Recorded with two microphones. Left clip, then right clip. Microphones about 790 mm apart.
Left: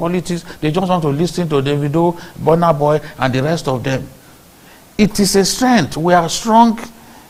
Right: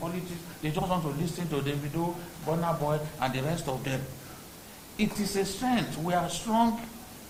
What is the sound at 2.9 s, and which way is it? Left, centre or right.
A man's voice, left.